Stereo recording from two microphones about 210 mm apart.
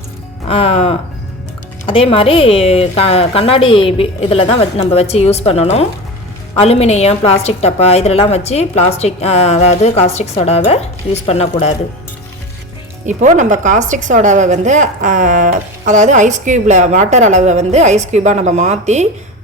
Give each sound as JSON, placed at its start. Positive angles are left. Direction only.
{"t": 0.4, "sound": "a woman's voice", "side_deg": 30}
{"t": 13.1, "sound": "a woman's voice", "side_deg": -35}